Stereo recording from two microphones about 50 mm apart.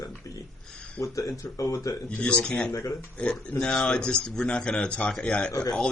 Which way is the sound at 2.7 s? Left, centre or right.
Left.